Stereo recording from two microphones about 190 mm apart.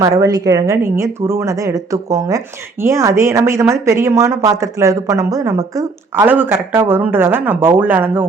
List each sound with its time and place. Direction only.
0.0 s a woman's voice: 20° right (ahead or behind)